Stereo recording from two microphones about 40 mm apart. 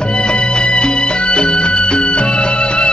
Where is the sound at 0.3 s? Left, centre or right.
Left.